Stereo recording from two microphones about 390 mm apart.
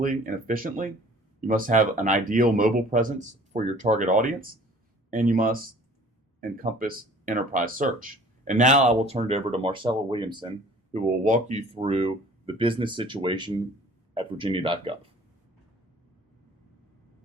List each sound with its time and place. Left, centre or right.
0.0 s speech: right